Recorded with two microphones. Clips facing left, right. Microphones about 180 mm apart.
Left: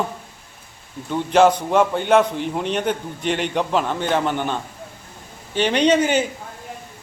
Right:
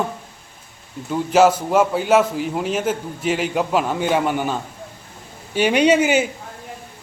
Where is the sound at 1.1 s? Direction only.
5° right (ahead or behind).